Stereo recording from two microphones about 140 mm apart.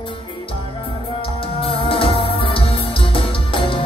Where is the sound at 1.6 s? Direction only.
40° left (ahead or behind).